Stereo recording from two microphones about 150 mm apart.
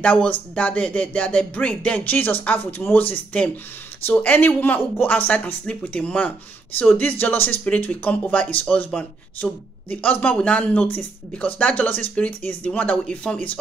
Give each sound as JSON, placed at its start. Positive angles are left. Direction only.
{"t": 0.0, "sound": "speech", "side_deg": 10}